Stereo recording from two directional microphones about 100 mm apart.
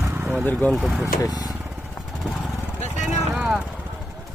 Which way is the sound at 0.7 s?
Centre (ahead or behind).